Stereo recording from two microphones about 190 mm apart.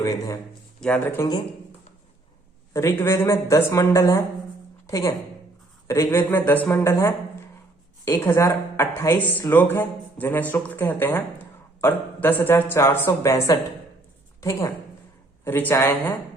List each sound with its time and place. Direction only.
0.8 s speech: 5° left (ahead or behind)
2.7 s a woman's voice: 15° left (ahead or behind)
15.4 s speech: 10° left (ahead or behind)